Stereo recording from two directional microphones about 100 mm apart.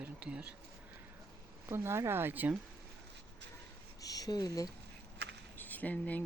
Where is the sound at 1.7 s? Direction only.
25° right (ahead or behind).